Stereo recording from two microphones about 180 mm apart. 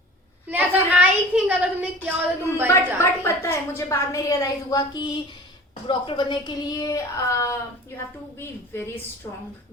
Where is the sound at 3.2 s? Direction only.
15° left (ahead or behind).